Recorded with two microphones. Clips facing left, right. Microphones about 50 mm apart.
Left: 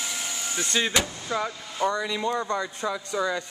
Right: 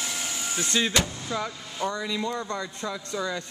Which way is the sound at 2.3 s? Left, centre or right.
Centre.